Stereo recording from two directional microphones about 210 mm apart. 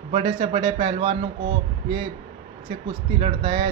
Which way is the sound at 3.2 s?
30° right (ahead or behind).